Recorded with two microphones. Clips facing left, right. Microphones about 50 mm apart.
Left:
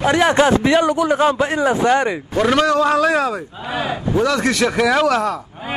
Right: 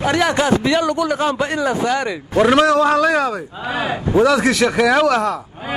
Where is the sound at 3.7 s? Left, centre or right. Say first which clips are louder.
Right 1 dB; right.